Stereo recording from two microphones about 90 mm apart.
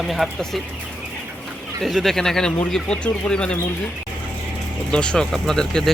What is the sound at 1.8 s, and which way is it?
Speech, centre (ahead or behind).